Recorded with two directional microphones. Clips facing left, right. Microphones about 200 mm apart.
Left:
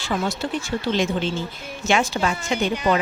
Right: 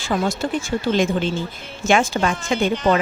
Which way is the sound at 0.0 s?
45° right (ahead or behind).